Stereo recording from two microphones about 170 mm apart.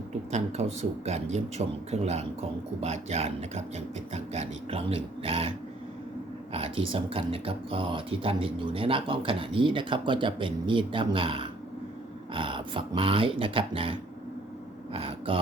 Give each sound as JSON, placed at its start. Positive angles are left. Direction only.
{"t": 0.3, "sound": "speech", "side_deg": -40}
{"t": 14.9, "sound": "speech", "side_deg": -35}